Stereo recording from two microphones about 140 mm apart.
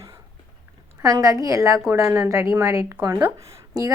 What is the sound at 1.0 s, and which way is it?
A woman's voice, 25° right (ahead or behind).